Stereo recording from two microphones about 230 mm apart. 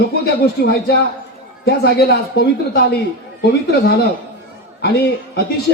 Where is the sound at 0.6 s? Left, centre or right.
Left.